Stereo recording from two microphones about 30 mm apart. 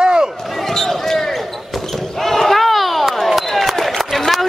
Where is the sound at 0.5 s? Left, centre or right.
Centre.